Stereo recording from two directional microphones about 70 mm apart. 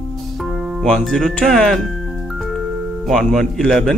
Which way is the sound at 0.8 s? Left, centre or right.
Centre.